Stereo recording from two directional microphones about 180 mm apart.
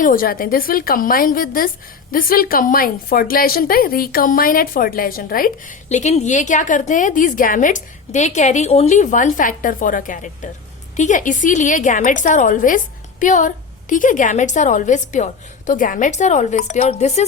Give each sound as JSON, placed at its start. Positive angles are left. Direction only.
{"t": 0.0, "sound": "a woman's voice", "side_deg": 50}
{"t": 5.9, "sound": "a woman's voice", "side_deg": 40}